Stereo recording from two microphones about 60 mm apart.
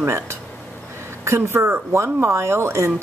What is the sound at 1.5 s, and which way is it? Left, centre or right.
A woman's voice, right.